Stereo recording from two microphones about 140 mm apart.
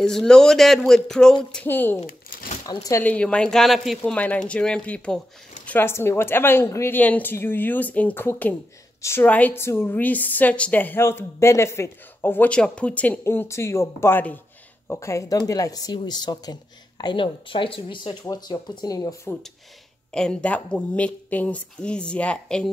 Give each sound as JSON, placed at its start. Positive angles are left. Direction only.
{"t": 0.0, "sound": "a woman's voice", "side_deg": 5}
{"t": 2.0, "sound": "a sound", "side_deg": 80}
{"t": 2.6, "sound": "speech", "side_deg": 25}
{"t": 3.0, "sound": "a woman's voice", "side_deg": 10}
{"t": 20.1, "sound": "a woman's voice", "side_deg": 5}